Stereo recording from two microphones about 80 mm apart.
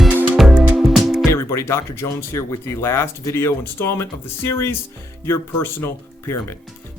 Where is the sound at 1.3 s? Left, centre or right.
Left.